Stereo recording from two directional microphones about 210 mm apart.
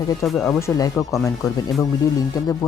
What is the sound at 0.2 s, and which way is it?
Speech, centre (ahead or behind).